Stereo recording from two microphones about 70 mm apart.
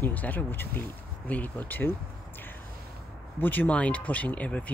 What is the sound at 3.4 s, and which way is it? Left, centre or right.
Speech, left.